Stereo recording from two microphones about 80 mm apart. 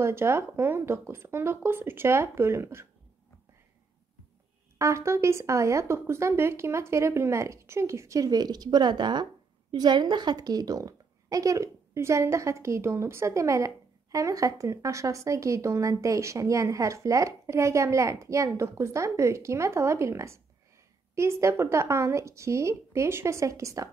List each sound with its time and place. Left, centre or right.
0.0 s speech: right
4.7 s speech: right